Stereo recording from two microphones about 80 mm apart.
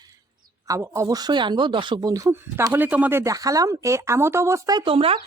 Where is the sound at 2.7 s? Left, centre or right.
Right.